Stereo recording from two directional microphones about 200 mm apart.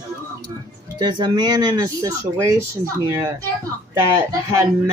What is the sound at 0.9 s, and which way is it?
Speech, 20° right (ahead or behind).